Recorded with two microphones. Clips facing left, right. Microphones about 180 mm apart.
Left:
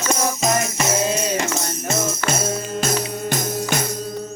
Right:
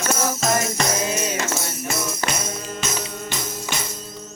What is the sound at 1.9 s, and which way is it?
Music, 45° left (ahead or behind).